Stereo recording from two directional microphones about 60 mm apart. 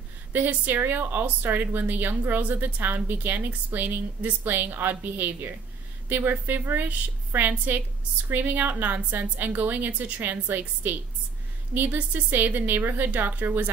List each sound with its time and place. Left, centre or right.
0.3 s a woman's voice: right